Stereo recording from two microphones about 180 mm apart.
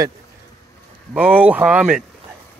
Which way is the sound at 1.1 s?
10° right (ahead or behind).